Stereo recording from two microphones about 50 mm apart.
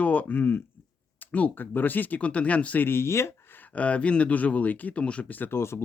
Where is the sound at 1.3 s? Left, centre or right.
Left.